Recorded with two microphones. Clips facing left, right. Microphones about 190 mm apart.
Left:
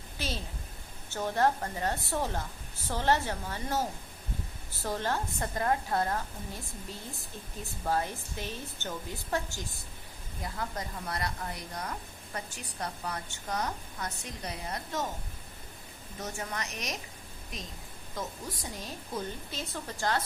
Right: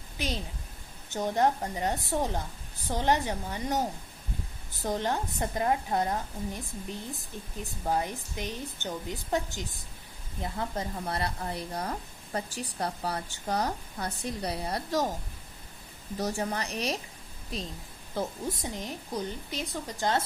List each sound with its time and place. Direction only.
1.1 s a woman's voice: 15° right (ahead or behind); by 15.1 s 35° right (ahead or behind)
16.1 s a woman's voice: 35° right (ahead or behind)